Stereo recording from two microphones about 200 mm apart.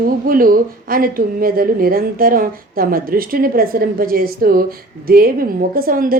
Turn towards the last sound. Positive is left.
turn(degrees=-45)  # may be behind; listen again after turning